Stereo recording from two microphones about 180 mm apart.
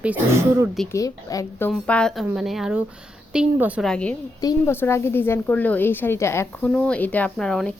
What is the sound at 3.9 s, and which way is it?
Speech, 5° left (ahead or behind).